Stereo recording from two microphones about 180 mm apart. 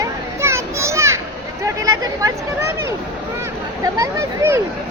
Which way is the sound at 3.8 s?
20° right (ahead or behind).